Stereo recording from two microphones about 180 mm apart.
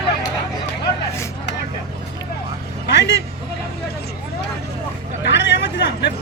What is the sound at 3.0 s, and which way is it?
Vehicle, 75° left (ahead or behind).